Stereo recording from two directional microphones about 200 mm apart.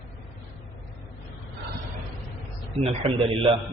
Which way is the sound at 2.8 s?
30° right (ahead or behind).